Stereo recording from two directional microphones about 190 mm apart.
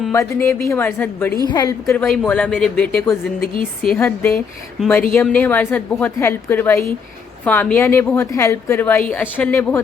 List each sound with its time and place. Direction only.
0.1 s a woman's voice: 15° left (ahead or behind)
1.5 s a woman's voice: 20° left (ahead or behind)
2.0 s a woman's voice: 5° left (ahead or behind)